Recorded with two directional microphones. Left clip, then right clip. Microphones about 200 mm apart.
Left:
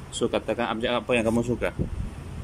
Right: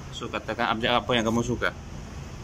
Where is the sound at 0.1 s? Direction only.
25° left (ahead or behind).